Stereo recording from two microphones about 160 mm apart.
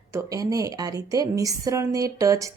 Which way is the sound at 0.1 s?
20° right (ahead or behind).